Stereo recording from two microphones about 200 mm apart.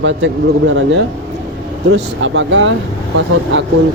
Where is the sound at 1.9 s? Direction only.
65° right (ahead or behind).